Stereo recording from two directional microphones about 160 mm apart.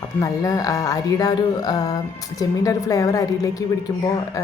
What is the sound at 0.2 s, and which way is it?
Speech, 20° left (ahead or behind).